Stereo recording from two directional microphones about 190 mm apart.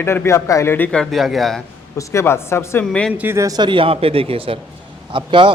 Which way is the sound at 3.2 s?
15° right (ahead or behind).